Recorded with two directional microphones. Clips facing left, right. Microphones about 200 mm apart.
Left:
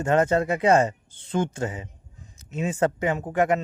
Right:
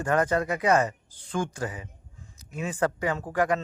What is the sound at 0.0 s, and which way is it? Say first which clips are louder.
Speech: left 4 dB; 25° left (ahead or behind).